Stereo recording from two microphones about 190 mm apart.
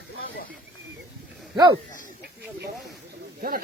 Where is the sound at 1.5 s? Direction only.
25° right (ahead or behind).